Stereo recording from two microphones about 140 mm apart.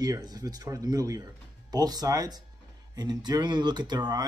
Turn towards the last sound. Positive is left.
turn(degrees=-30)  # may be behind; listen again after turning